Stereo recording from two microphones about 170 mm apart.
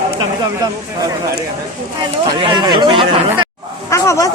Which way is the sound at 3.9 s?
15° left (ahead or behind).